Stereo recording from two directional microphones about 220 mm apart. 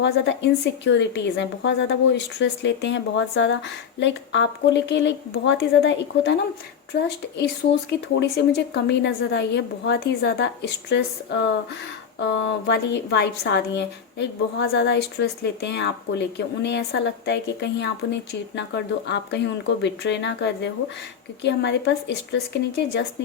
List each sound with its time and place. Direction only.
0.0 s a woman's voice: 55° left (ahead or behind)